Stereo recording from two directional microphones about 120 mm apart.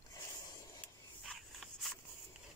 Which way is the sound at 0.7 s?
5° left (ahead or behind).